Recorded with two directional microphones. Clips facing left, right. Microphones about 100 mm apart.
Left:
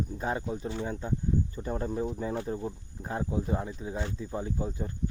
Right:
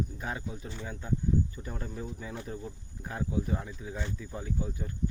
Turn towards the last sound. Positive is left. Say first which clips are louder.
# left 2 dB
turn(degrees=30)  # may be behind; listen again after turning